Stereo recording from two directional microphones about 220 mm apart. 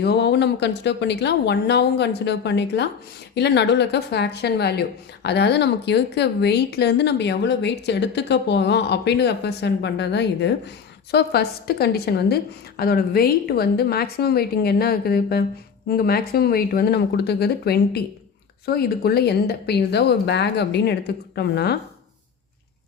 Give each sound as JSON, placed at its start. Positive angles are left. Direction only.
{"t": 0.0, "sound": "a woman's voice", "side_deg": 50}